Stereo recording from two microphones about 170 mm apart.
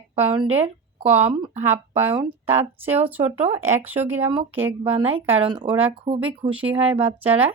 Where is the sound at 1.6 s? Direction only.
10° right (ahead or behind).